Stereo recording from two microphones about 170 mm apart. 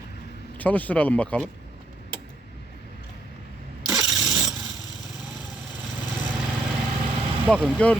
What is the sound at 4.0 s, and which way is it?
Engine starting, centre (ahead or behind).